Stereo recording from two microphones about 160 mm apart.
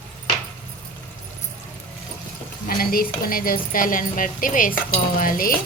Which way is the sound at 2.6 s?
65° left (ahead or behind).